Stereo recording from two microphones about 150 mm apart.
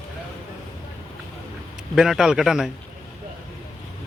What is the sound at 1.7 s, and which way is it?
Speech, 5° right (ahead or behind).